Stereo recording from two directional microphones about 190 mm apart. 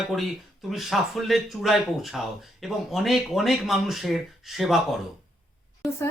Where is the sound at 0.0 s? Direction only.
Centre (ahead or behind).